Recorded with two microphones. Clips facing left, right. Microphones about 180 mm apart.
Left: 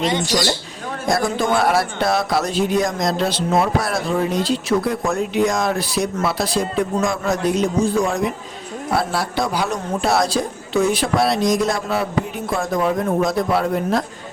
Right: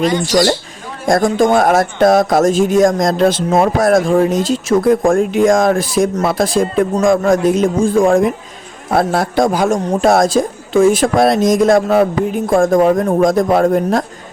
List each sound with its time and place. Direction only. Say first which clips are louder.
0.0 s speech: right 5 dB; 25° left (ahead or behind)
1.0 s a man's voice: right 7 dB; 45° right (ahead or behind)